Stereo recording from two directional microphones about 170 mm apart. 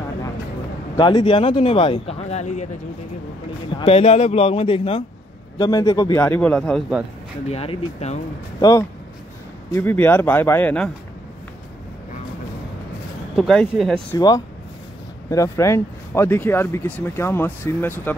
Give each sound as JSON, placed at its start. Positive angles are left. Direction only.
{"t": 0.9, "sound": "speech", "side_deg": 30}
{"t": 3.7, "sound": "speech", "side_deg": 35}
{"t": 5.6, "sound": "speech", "side_deg": 20}
{"t": 7.4, "sound": "speech", "side_deg": 35}
{"t": 8.5, "sound": "speech", "side_deg": 20}
{"t": 13.4, "sound": "speech", "side_deg": 0}
{"t": 14.1, "sound": "speech", "side_deg": 20}